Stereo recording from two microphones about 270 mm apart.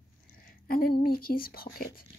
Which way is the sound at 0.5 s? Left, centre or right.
Left.